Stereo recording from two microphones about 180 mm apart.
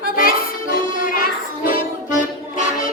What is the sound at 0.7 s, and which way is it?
Music, 50° left (ahead or behind).